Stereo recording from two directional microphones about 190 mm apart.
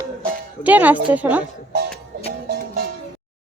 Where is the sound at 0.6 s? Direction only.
10° right (ahead or behind).